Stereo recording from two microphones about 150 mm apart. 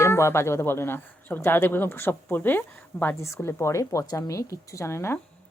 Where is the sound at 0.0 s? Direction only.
15° left (ahead or behind).